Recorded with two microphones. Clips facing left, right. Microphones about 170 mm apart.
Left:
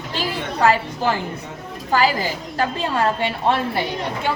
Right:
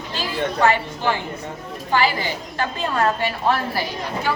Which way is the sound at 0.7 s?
40° left (ahead or behind).